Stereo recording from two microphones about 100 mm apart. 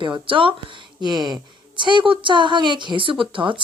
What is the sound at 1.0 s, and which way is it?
A woman's voice, 45° right (ahead or behind).